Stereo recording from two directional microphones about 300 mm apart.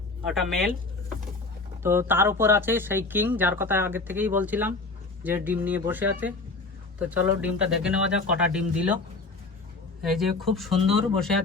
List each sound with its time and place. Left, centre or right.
0.3 s speech: centre
1.8 s speech: centre
10.0 s speech: centre